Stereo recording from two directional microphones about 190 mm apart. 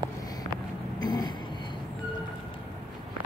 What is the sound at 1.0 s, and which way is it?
Vehicle, 20° left (ahead or behind).